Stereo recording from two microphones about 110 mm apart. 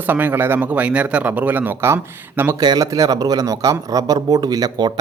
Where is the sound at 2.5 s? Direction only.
40° right (ahead or behind).